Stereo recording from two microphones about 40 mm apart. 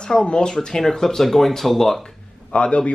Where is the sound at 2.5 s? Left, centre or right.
Left.